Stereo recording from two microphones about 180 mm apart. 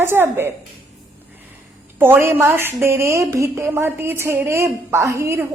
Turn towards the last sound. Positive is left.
turn(degrees=-15)  # may be behind; listen again after turning